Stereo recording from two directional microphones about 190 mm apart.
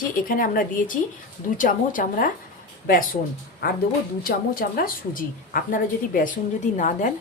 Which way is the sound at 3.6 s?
55° left (ahead or behind).